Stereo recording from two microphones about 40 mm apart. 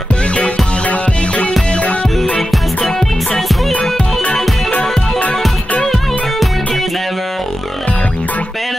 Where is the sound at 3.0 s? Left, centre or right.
Centre.